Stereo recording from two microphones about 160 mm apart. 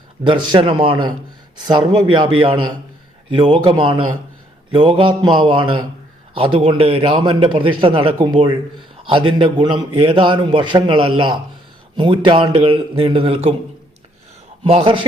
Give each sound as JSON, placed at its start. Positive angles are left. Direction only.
{"t": 0.3, "sound": "a man's voice", "side_deg": -30}
{"t": 14.6, "sound": "a man's voice", "side_deg": -35}